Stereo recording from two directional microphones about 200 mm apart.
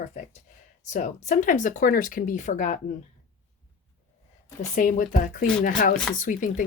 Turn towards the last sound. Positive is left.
turn(degrees=40)  # may be behind; listen again after turning